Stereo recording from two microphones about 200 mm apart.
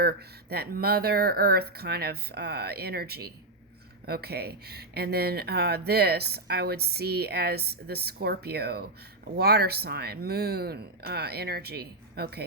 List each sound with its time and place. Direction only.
0.0 s speech: 50° right (ahead or behind)